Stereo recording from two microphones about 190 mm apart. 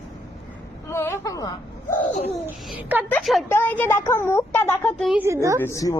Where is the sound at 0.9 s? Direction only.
15° left (ahead or behind).